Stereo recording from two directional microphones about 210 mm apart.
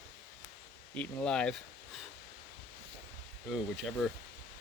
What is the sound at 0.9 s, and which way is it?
Speech, 5° left (ahead or behind).